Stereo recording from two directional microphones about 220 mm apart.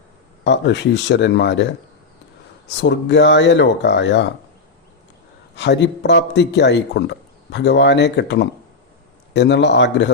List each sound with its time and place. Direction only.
0.4 s speech: 55° left (ahead or behind)
2.6 s speech: 55° left (ahead or behind)
5.5 s speech: 50° left (ahead or behind)